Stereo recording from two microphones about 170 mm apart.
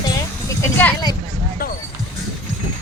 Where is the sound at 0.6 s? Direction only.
10° left (ahead or behind).